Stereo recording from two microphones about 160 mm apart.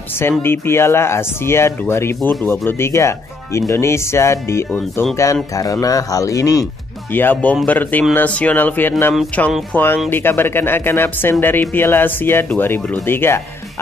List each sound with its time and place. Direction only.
0.2 s speech: 15° left (ahead or behind)
10.0 s speech: 15° left (ahead or behind)